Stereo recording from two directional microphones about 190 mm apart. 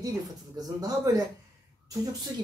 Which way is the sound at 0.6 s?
20° right (ahead or behind).